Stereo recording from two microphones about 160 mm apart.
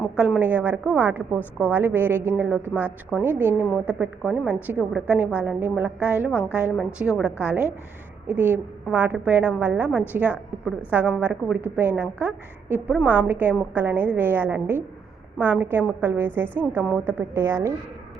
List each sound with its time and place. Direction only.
0.0 s a woman's voice: 5° right (ahead or behind)